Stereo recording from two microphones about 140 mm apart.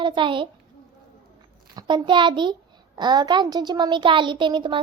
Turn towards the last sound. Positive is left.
turn(degrees=-35)  # may be behind; listen again after turning